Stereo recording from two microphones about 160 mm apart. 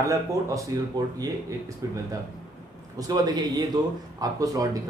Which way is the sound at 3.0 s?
25° right (ahead or behind).